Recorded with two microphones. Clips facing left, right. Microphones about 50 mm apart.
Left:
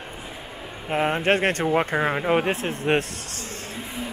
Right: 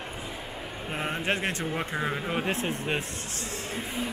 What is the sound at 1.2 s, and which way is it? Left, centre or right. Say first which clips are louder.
Speech: left 8 dB; left.